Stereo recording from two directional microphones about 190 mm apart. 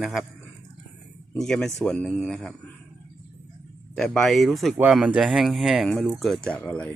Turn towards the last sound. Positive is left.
turn(degrees=5)  # may be behind; listen again after turning